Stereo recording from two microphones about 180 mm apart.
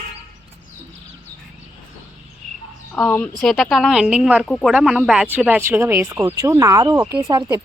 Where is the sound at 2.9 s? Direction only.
10° left (ahead or behind); by 7.6 s 20° right (ahead or behind).